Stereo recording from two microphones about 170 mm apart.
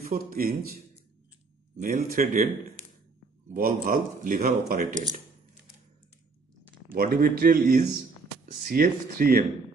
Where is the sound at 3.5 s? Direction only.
55° right (ahead or behind).